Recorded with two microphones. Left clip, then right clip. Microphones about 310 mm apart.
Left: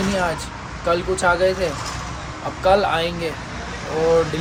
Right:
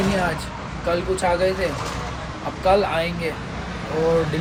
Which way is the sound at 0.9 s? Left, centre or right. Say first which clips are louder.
Left 3 dB; centre.